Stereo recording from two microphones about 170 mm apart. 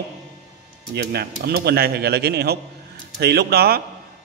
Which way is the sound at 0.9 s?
70° right (ahead or behind).